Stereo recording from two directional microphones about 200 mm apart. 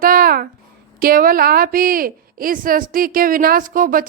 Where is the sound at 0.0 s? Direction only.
45° right (ahead or behind).